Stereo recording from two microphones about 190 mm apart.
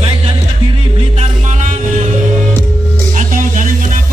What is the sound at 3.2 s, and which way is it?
Music, 45° right (ahead or behind).